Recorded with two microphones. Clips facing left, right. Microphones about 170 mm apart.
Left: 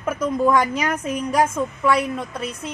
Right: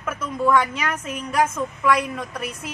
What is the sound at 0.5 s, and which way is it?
A woman's voice, 40° left (ahead or behind).